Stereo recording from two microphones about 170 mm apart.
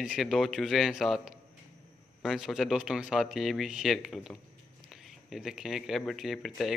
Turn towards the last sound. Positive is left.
turn(degrees=0)  # may be behind; listen again after turning